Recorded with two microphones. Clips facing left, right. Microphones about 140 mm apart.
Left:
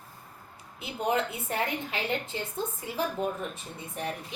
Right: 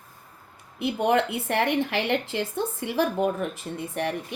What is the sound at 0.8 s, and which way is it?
Speech, 70° right (ahead or behind).